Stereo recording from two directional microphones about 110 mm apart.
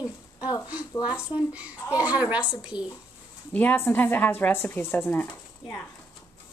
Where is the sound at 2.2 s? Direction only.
10° right (ahead or behind).